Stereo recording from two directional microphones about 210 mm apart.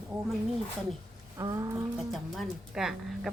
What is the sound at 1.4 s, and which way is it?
Speech, 15° right (ahead or behind).